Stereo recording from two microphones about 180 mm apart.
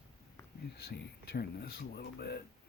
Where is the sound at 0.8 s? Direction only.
60° left (ahead or behind).